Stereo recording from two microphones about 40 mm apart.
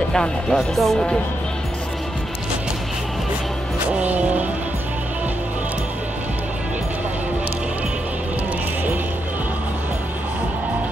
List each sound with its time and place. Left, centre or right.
0.1 s speech: centre
0.7 s speech: centre
3.9 s music: right